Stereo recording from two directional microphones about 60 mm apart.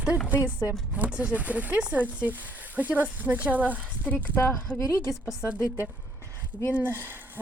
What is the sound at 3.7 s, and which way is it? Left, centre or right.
A woman's voice, left.